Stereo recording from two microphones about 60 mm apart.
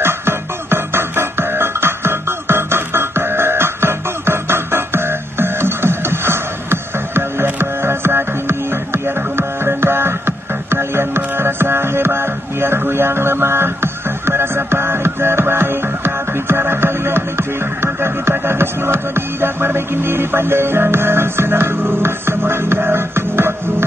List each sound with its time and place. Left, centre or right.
0.0 s music: right